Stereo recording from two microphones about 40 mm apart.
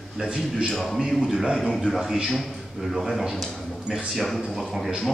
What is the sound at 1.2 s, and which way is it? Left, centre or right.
A man's voice, centre.